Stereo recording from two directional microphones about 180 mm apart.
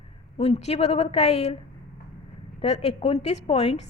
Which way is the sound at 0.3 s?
35° left (ahead or behind).